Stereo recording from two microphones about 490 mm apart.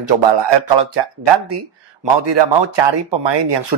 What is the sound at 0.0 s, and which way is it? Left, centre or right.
Speech, right.